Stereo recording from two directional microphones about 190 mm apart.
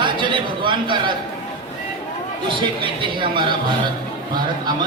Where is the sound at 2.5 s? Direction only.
25° right (ahead or behind).